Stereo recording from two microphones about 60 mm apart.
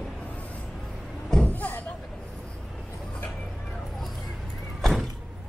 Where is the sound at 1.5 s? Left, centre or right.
Left.